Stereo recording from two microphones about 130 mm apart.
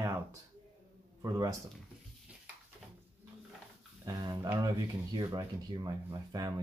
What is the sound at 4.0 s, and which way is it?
Speech, 30° right (ahead or behind).